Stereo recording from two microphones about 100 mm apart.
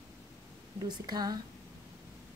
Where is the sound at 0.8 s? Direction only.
40° right (ahead or behind).